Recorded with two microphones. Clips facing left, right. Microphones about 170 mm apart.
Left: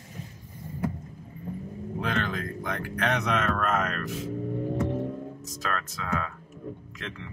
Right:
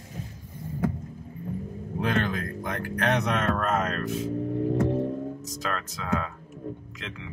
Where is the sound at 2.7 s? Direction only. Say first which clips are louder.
Right 2 dB; 40° right (ahead or behind).